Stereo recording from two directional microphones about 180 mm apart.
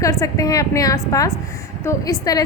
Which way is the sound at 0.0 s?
20° left (ahead or behind).